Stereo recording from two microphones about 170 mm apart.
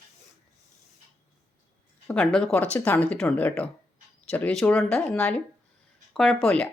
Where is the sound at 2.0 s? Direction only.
10° left (ahead or behind).